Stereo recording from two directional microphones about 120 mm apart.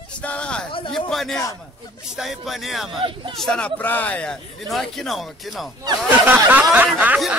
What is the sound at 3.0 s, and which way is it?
Speech, 50° right (ahead or behind).